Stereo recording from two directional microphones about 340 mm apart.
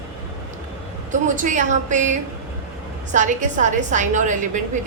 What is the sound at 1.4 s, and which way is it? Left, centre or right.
A woman's voice, right.